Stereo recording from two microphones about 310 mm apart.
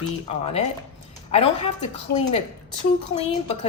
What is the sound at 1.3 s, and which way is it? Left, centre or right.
Speech, centre.